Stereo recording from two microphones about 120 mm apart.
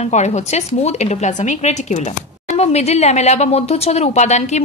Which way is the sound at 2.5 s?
60° left (ahead or behind).